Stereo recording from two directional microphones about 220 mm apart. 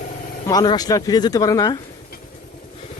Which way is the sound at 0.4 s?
20° left (ahead or behind).